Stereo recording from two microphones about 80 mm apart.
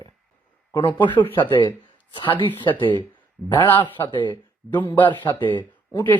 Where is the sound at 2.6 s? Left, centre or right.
Left.